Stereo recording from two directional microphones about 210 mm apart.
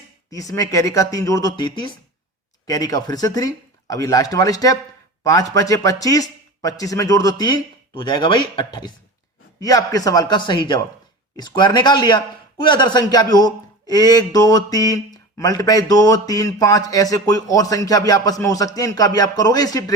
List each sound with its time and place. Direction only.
0.3 s mantra: 15° left (ahead or behind)
5.2 s a man's voice: 15° left (ahead or behind)
5.5 s mantra: 15° left (ahead or behind)
11.3 s speech: 20° left (ahead or behind)
13.3 s mantra: 20° left (ahead or behind)